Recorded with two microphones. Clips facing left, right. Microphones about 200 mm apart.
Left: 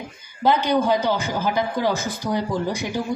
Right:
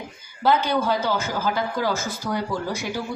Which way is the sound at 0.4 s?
15° left (ahead or behind).